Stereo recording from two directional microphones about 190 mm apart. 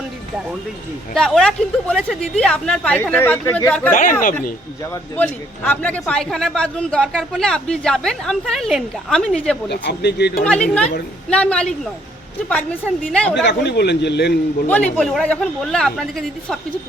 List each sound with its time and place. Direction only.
1.1 s a man's voice: 5° left (ahead or behind)
5.1 s a man's voice: 10° left (ahead or behind)
9.6 s a man's voice: 65° left (ahead or behind)
10.4 s a man's voice: 5° left (ahead or behind)
13.4 s a man's voice: 65° left (ahead or behind)
14.7 s a man's voice: 5° left (ahead or behind)